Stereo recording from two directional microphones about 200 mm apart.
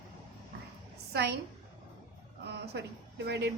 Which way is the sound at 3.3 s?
55° right (ahead or behind).